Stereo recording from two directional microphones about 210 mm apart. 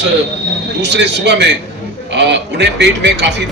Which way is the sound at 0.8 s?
55° right (ahead or behind).